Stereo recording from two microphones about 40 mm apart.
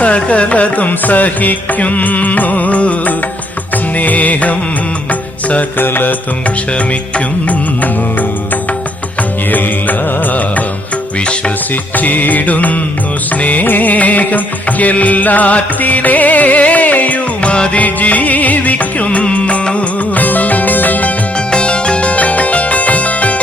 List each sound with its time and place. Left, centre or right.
0.0 s music: left
5.7 s music: left
9.5 s music: left
11.9 s music: left
17.4 s music: left
17.7 s music: left
20.2 s music: left
21.5 s music: left